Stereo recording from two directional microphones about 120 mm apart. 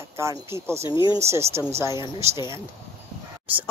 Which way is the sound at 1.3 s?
20° right (ahead or behind).